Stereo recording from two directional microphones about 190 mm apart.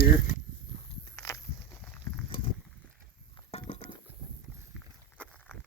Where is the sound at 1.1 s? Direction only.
15° left (ahead or behind).